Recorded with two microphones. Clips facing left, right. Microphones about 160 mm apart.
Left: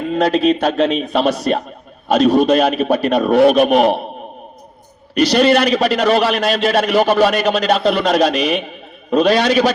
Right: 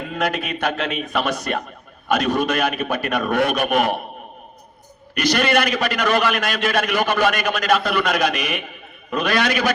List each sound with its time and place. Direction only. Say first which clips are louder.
0.1 s a man's voice: left 11 dB; 30° left (ahead or behind)
5.4 s a man's voice: left 7 dB; 25° left (ahead or behind)